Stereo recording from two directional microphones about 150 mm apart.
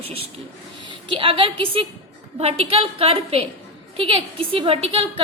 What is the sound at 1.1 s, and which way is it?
A woman's voice, 35° right (ahead or behind).